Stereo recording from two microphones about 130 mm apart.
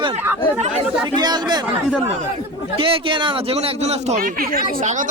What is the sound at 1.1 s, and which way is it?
Speech, 35° right (ahead or behind).